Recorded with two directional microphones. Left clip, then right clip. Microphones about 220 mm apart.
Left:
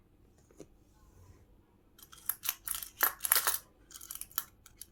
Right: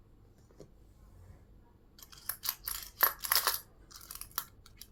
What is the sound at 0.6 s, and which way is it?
Power windows, 10° left (ahead or behind).